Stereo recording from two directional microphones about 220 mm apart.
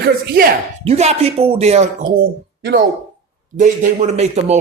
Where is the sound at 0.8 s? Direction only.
30° right (ahead or behind).